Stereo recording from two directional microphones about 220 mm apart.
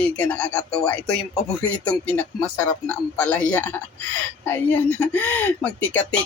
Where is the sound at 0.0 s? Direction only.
5° left (ahead or behind).